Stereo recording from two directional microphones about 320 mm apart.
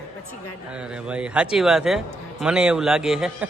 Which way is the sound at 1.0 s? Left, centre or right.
Centre.